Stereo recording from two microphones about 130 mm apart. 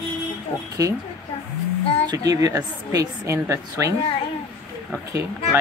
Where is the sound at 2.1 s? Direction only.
30° right (ahead or behind).